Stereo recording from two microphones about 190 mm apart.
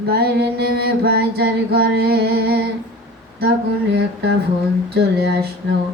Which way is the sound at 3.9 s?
60° right (ahead or behind).